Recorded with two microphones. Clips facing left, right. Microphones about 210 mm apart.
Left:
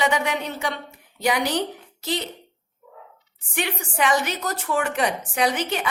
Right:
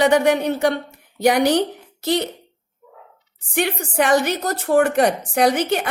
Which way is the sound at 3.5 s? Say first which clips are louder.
Right 6 dB; 55° right (ahead or behind).